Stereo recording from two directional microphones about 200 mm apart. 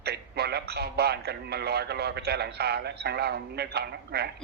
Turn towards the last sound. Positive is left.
turn(degrees=-55)  # may be behind; listen again after turning